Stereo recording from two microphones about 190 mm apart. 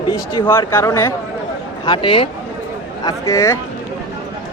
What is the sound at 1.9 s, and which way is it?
Speech, 25° left (ahead or behind).